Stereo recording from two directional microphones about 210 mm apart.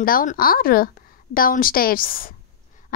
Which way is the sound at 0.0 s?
40° left (ahead or behind).